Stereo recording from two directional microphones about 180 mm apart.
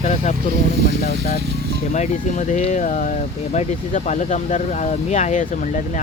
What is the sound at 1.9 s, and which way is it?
Speech, 40° left (ahead or behind).